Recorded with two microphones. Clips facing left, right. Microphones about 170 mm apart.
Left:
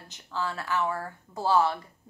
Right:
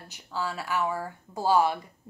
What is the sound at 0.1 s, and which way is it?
Speech, 10° right (ahead or behind).